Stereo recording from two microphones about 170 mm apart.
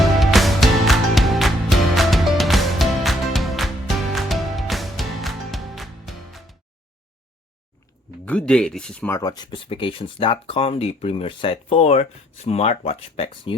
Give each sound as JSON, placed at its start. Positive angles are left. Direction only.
{"t": 0.0, "sound": "music", "side_deg": 0}
{"t": 8.2, "sound": "speech", "side_deg": 5}
{"t": 9.1, "sound": "speech", "side_deg": 25}